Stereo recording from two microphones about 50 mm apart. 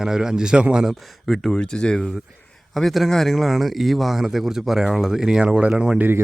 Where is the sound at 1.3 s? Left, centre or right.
Centre.